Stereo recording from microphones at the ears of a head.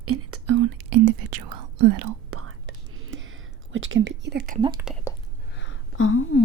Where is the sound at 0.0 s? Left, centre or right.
Right.